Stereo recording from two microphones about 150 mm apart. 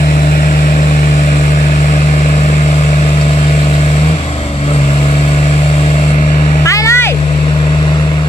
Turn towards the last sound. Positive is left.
turn(degrees=15)  # may be behind; listen again after turning